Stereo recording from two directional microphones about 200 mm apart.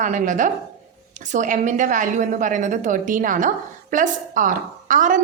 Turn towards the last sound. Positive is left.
turn(degrees=-40)  # may be behind; listen again after turning